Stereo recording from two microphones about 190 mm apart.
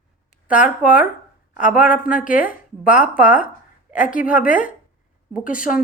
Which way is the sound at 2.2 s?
45° left (ahead or behind).